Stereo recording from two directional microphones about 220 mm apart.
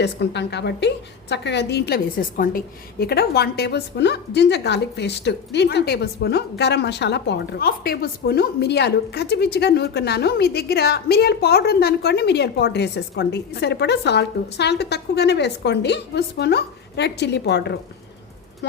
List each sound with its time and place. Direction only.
0.0 s a woman's voice: 50° left (ahead or behind)